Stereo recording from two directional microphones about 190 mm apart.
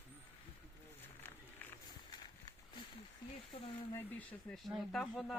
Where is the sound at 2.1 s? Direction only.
25° left (ahead or behind).